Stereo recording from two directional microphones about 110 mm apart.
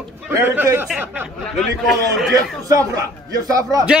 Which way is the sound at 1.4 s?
Centre (ahead or behind).